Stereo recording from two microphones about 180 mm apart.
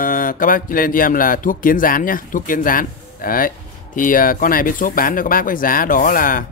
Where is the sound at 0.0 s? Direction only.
50° left (ahead or behind).